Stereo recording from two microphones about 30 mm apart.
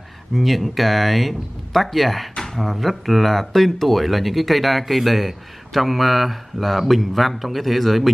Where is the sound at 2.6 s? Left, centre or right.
Centre.